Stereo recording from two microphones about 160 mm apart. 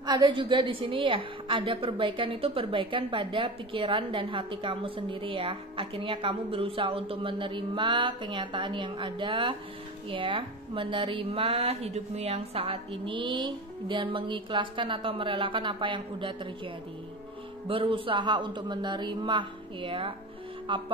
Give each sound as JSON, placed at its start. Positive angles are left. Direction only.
{"t": 0.0, "sound": "a woman's voice", "side_deg": -25}